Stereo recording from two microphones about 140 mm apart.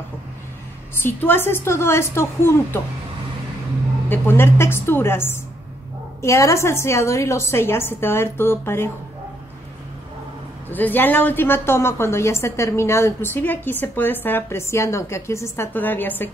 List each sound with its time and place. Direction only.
1.0 s a woman's voice: 15° left (ahead or behind)
4.1 s a woman's voice: 15° left (ahead or behind)
10.7 s a woman's voice: 15° left (ahead or behind)